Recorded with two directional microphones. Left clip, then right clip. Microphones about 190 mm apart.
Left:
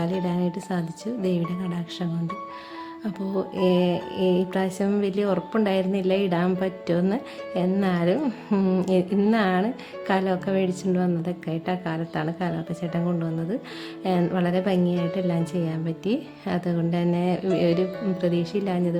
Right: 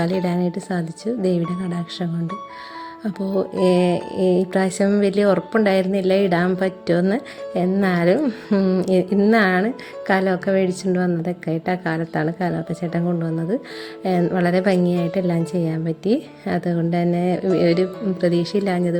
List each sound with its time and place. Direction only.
0.0 s speech: 25° right (ahead or behind)